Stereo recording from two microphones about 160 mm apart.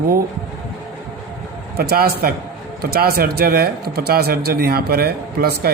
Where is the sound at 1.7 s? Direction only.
75° right (ahead or behind).